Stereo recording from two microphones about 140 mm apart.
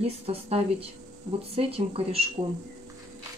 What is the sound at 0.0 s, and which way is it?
Speech, 45° right (ahead or behind).